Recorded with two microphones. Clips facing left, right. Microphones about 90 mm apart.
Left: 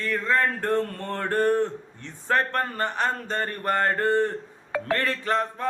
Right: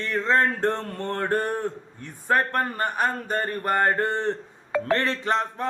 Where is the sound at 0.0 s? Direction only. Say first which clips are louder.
Right 2 dB; 25° right (ahead or behind).